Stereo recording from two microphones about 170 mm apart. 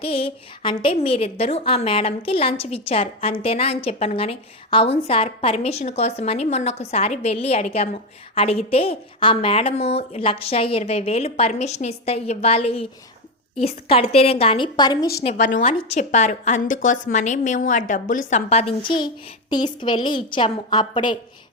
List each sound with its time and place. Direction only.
0.0 s a woman's voice: 35° left (ahead or behind)
15.2 s a woman's voice: 35° left (ahead or behind)
18.9 s a woman's voice: 25° left (ahead or behind)